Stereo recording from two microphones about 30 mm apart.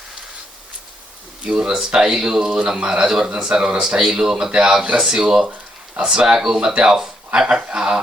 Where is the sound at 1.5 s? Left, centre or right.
Right.